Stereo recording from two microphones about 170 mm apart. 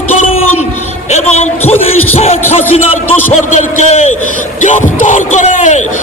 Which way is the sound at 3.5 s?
45° left (ahead or behind).